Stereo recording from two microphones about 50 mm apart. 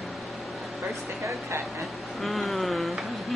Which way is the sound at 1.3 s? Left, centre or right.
Right.